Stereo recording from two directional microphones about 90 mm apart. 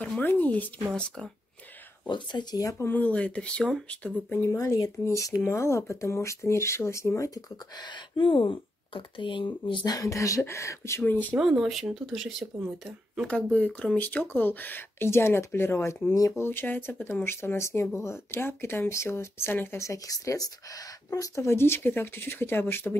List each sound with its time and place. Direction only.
0.2 s speech: 20° left (ahead or behind)
2.0 s speech: 60° left (ahead or behind)
2.8 s speech: 20° left (ahead or behind)
4.4 s speech: 35° left (ahead or behind)
8.2 s speech: 70° left (ahead or behind)
9.9 s speech: 35° left (ahead or behind); by 11.3 s 20° left (ahead or behind)
11.3 s speech: 5° right (ahead or behind)
13.3 s speech: 15° left (ahead or behind)
16.1 s speech: 40° left (ahead or behind)
16.3 s speech: 25° left (ahead or behind)